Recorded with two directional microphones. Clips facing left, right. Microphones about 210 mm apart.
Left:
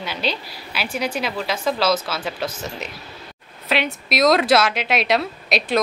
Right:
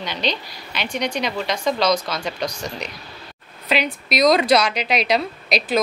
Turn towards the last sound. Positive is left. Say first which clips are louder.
# even
turn(degrees=0)  # may be behind; listen again after turning